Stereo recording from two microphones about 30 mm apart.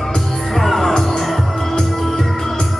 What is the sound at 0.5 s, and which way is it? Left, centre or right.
Music, centre.